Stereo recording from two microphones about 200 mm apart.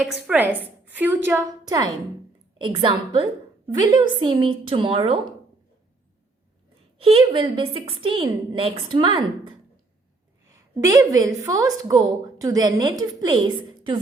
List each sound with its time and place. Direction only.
0.0 s a woman's voice: 5° right (ahead or behind); by 5.2 s 30° right (ahead or behind)
7.0 s a woman's voice: 25° right (ahead or behind)
10.4 s a woman's voice: 15° right (ahead or behind)